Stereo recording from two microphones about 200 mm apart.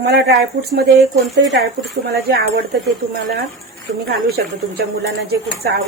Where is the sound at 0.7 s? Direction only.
55° right (ahead or behind).